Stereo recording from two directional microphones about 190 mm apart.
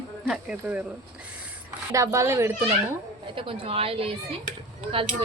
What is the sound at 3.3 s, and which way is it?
Speech, 25° right (ahead or behind).